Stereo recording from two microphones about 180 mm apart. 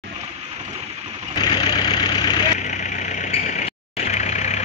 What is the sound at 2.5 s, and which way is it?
Vehicle, 45° left (ahead or behind).